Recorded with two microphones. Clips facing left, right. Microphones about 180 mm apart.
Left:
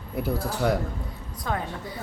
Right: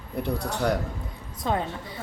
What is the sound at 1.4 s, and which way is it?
Speech, 25° right (ahead or behind).